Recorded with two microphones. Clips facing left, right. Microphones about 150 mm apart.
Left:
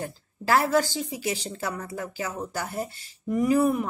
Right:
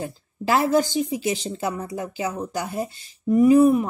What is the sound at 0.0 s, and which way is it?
A woman's voice, 20° right (ahead or behind).